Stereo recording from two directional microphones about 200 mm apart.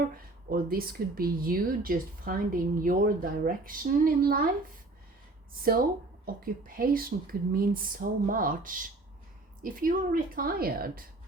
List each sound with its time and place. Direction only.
0.0 s speech: 45° right (ahead or behind)
6.2 s speech: 45° right (ahead or behind)